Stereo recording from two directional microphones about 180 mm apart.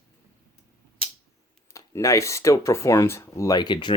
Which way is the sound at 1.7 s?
20° left (ahead or behind).